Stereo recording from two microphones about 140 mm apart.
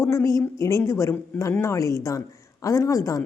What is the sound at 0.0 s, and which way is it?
A woman's voice, 20° left (ahead or behind).